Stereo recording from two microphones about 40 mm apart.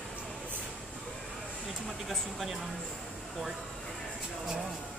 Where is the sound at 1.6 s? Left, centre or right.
Centre.